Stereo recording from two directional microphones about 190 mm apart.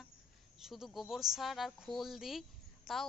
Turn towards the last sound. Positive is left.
turn(degrees=0)  # may be behind; listen again after turning